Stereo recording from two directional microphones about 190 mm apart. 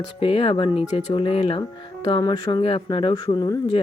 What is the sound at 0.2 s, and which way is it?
Speech, 30° left (ahead or behind).